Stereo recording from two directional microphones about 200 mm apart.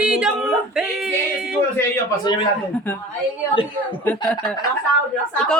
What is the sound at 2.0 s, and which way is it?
Speech, 20° left (ahead or behind).